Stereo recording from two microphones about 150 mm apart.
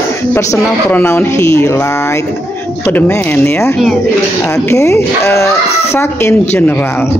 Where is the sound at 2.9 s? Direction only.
15° left (ahead or behind).